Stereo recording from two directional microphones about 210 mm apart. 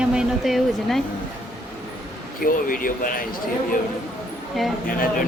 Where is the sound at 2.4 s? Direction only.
40° left (ahead or behind).